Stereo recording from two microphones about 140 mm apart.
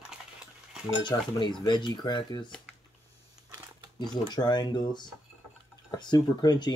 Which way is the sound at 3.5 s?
15° right (ahead or behind).